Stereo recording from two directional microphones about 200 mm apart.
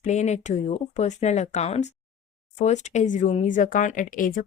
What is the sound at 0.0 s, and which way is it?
Speech, 35° left (ahead or behind).